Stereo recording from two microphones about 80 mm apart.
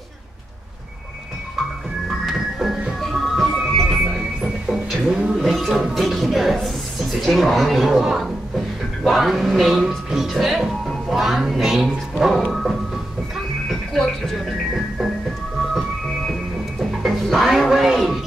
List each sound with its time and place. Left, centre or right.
2.2 s music: centre
4.6 s speech: centre
13.7 s music: centre
17.0 s music: centre